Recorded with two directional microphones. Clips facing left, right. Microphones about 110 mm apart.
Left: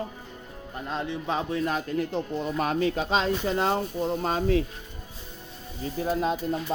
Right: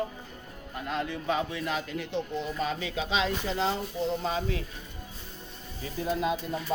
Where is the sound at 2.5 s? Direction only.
55° left (ahead or behind).